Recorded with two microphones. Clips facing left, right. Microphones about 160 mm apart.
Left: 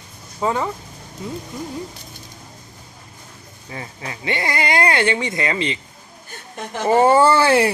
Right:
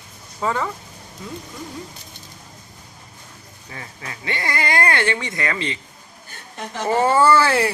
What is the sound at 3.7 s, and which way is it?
Speech, 25° left (ahead or behind).